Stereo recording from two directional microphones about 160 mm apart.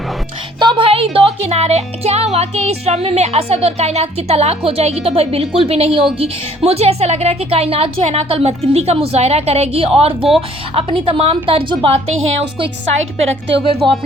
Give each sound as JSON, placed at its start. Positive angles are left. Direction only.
{"t": 0.6, "sound": "speech", "side_deg": -30}
{"t": 13.7, "sound": "speech", "side_deg": -35}